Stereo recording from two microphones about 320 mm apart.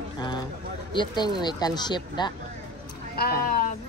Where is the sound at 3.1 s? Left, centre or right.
Left.